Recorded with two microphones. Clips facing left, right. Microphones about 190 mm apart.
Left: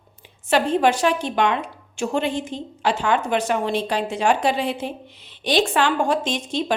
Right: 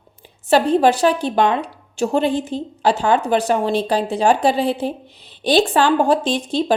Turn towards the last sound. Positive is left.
turn(degrees=-35)  # may be behind; listen again after turning